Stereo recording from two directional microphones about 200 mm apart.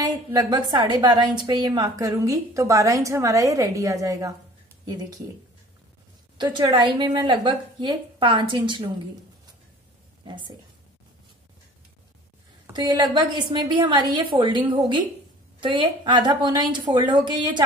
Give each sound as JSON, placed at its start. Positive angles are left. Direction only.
{"t": 0.0, "sound": "a woman's voice", "side_deg": -20}
{"t": 6.3, "sound": "a woman's voice", "side_deg": -20}
{"t": 10.2, "sound": "a woman's voice", "side_deg": -20}
{"t": 12.7, "sound": "a woman's voice", "side_deg": -20}